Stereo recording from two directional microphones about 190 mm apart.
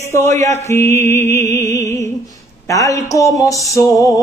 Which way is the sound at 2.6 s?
15° left (ahead or behind).